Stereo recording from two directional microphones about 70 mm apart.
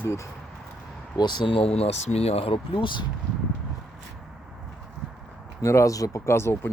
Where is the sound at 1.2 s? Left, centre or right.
Left.